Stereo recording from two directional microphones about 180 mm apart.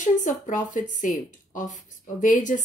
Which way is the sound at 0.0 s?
45° left (ahead or behind).